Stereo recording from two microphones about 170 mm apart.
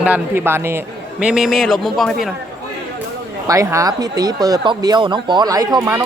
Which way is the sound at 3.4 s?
20° right (ahead or behind).